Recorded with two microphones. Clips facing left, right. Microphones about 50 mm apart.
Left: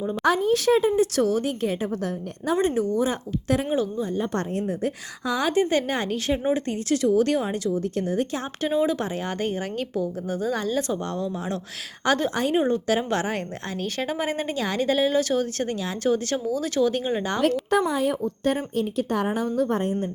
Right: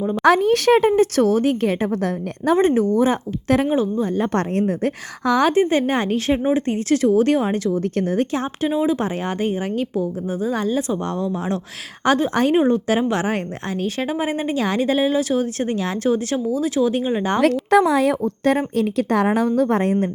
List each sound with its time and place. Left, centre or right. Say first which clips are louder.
0.2 s a woman's voice: right 6 dB; right
1.6 s a woman's voice: right 6 dB; right
2.6 s speech: right 5 dB; right
3.7 s a woman's voice: right 5 dB; right
4.2 s a woman's voice: right 7 dB; right
5.5 s speech: right 5 dB; right
7.7 s speech: right 4 dB; right
8.6 s speech: right 2 dB; centre
9.0 s a woman's voice: right 5 dB; right
12.3 s speech: right 7 dB; right
12.5 s a woman's voice: right 5 dB; right
15.7 s speech: right 4 dB; right
16.1 s speech: right 4 dB; right
17.4 s a woman's voice: right 7 dB; right